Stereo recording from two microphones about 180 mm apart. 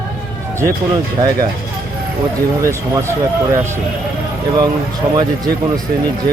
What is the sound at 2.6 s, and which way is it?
Speech, 15° right (ahead or behind).